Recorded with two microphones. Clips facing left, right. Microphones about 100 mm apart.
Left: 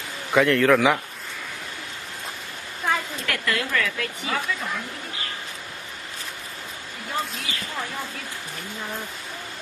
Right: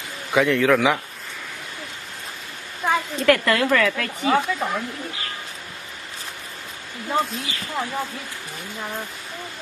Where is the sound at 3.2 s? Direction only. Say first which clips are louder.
Right 9 dB; 55° right (ahead or behind).